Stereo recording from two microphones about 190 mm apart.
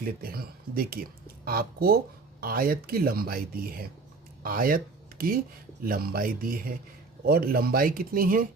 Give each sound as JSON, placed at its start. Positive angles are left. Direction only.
{"t": 0.0, "sound": "speech", "side_deg": -50}